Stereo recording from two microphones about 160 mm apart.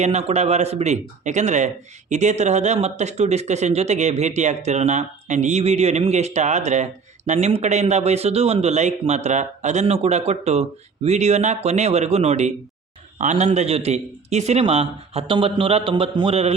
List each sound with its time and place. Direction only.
0.0 s a man's voice: 40° right (ahead or behind)